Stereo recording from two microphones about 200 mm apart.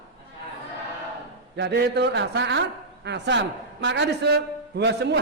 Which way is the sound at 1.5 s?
55° right (ahead or behind).